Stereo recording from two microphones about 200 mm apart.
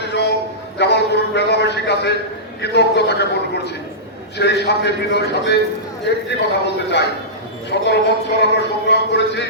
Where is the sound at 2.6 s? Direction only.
55° left (ahead or behind).